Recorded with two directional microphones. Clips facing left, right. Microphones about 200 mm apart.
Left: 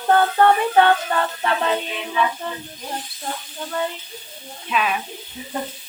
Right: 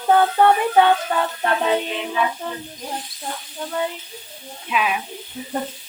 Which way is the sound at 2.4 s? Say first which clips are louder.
Even; 10° right (ahead or behind).